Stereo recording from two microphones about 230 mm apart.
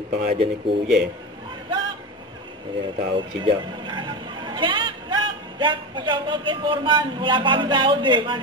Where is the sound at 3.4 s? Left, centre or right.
Right.